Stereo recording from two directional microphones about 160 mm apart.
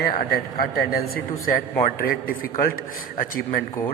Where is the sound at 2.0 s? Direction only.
65° left (ahead or behind).